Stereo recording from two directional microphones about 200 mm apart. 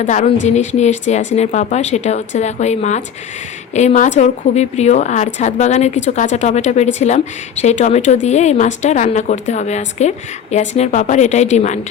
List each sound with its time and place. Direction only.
0.0 s speech: 35° left (ahead or behind)